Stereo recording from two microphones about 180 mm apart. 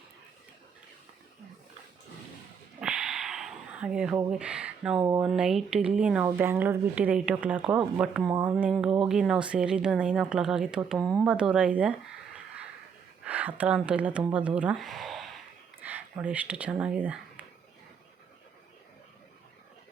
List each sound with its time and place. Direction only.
2.8 s a sound: 5° right (ahead or behind)
4.3 s speech: 5° right (ahead or behind)
8.3 s speech: 25° right (ahead or behind)
8.5 s speech: centre (ahead or behind)
13.2 s speech: 10° right (ahead or behind)